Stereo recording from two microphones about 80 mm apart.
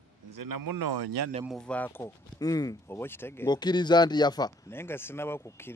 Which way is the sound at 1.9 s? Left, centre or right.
Left.